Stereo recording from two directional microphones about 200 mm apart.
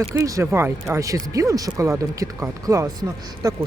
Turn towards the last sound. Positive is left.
turn(degrees=-15)  # may be behind; listen again after turning